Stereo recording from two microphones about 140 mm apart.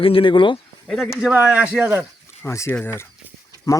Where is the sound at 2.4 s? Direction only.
20° left (ahead or behind).